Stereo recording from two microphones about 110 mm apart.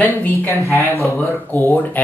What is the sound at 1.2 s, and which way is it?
Speech, 20° left (ahead or behind).